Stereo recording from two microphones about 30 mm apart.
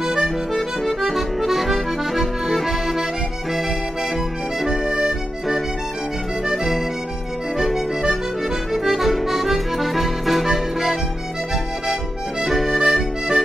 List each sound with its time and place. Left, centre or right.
0.0 s accordion: centre
0.5 s accordion: centre
4.8 s accordion: right
6.4 s music: centre
8.7 s accordion: centre
11.5 s music: centre